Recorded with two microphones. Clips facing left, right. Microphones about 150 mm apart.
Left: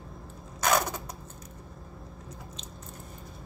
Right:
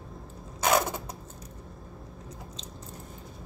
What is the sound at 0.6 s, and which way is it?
Mechanisms, 20° right (ahead or behind).